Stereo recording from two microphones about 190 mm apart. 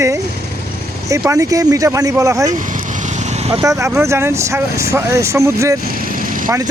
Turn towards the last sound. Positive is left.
turn(degrees=-45)  # may be behind; listen again after turning